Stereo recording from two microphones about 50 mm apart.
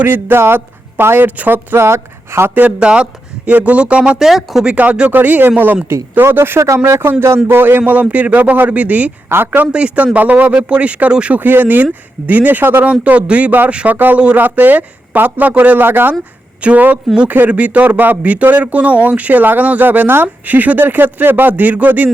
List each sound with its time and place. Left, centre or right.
0.0 s speech: right
0.3 s speech: right
1.8 s speech: right
2.6 s speech: right
4.2 s speech: centre
4.6 s a man's voice: right
6.8 s a man's voice: right
7.4 s a man's voice: right
8.1 s speech: right
10.7 s speech: right
11.3 s speech: right
12.8 s speech: right
13.8 s speech: right
16.6 s a man's voice: right